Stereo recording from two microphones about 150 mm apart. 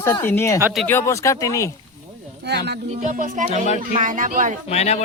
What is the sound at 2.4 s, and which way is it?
Speech, 90° right.